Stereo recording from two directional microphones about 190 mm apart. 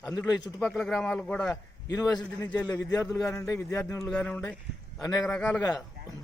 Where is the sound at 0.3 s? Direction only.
20° left (ahead or behind).